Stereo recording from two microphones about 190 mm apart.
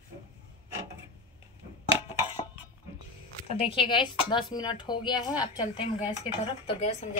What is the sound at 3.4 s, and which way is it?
Speech, 30° left (ahead or behind).